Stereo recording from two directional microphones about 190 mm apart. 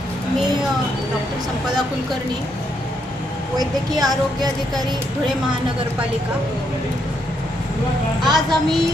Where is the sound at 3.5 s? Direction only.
20° right (ahead or behind).